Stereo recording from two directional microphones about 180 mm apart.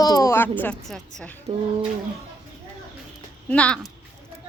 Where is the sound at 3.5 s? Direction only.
5° left (ahead or behind).